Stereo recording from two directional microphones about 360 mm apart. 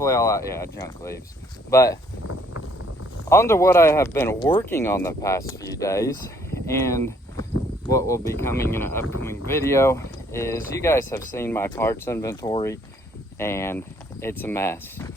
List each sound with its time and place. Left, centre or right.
0.0 s speech: centre
2.2 s a sound: left
3.2 s speech: centre